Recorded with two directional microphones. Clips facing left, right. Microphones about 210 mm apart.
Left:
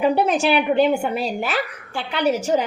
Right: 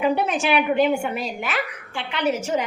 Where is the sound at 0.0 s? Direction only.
35° left (ahead or behind).